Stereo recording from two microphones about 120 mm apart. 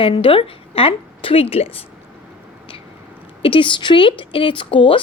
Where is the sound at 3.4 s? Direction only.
45° left (ahead or behind).